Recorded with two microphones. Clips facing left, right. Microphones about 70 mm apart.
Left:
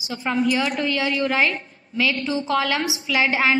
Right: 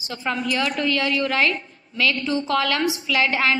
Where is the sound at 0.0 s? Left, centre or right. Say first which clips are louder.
Left 4 dB; centre.